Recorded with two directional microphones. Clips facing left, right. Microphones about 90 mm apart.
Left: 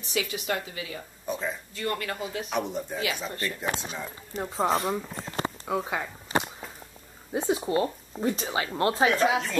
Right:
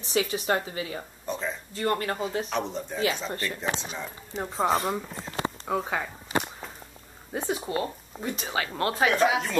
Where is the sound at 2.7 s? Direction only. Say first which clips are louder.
Right 2 dB; 10° left (ahead or behind).